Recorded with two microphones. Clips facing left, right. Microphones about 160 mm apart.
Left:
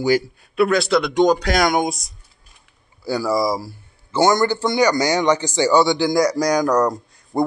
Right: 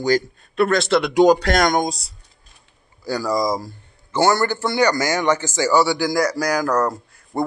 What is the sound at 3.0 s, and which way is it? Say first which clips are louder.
A man's voice: left 1 dB; 10° left (ahead or behind).